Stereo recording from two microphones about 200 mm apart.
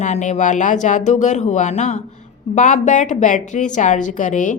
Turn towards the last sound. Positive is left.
turn(degrees=40)  # may be behind; listen again after turning